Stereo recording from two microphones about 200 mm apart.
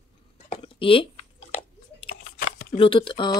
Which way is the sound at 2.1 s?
40° left (ahead or behind).